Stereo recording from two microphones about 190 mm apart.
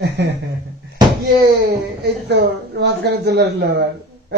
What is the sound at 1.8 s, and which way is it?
Speech, 60° right (ahead or behind).